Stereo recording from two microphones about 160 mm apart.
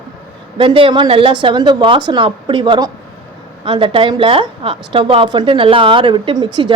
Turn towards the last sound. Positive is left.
turn(degrees=-30)  # may be behind; listen again after turning